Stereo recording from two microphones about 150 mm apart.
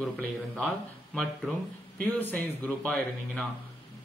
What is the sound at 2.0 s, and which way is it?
Speech, 10° left (ahead or behind).